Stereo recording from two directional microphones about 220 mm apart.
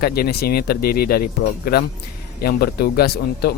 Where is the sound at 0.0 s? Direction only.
45° left (ahead or behind).